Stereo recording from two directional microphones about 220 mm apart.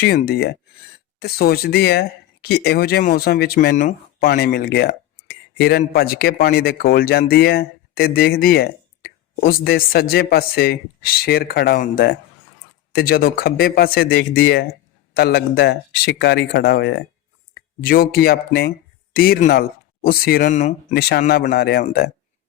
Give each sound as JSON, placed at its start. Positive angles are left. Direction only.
{"t": 0.0, "sound": "speech", "side_deg": 45}
{"t": 20.5, "sound": "speech", "side_deg": 30}
{"t": 20.9, "sound": "speech", "side_deg": 45}